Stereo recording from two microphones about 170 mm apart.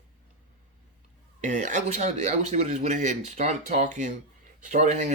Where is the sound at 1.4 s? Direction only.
45° right (ahead or behind).